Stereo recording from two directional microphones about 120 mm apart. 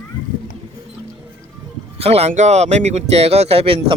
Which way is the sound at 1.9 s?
60° right (ahead or behind).